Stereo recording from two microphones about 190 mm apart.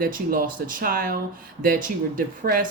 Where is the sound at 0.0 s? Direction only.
45° right (ahead or behind).